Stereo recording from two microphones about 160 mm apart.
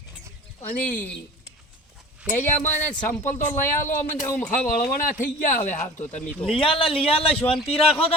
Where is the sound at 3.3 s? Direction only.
15° left (ahead or behind).